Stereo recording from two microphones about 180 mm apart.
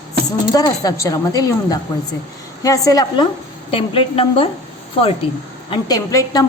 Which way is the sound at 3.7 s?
30° left (ahead or behind).